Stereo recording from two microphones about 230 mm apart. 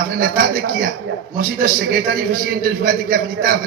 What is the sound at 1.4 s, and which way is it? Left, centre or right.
A man's voice, right.